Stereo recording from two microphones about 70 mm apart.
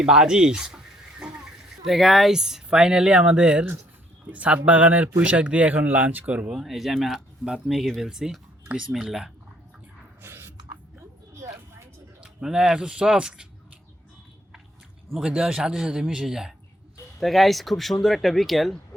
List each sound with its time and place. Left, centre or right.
0.0 s speech: centre
6.6 s speech: centre
10.2 s a sound: right
12.2 s speech: centre
15.2 s speech: centre